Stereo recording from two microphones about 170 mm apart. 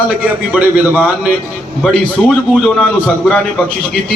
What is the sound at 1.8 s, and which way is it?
A man's voice, 5° left (ahead or behind).